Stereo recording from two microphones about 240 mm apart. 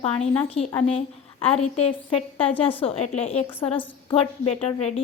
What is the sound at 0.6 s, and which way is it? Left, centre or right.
A woman's voice, left.